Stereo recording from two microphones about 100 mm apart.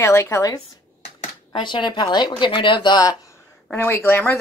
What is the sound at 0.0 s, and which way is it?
Speech, 30° left (ahead or behind).